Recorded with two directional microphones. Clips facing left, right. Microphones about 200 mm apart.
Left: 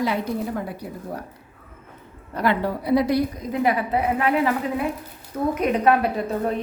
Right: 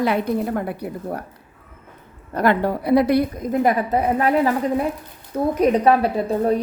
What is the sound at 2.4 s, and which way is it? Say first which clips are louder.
A woman's voice: right 4 dB; 50° right (ahead or behind).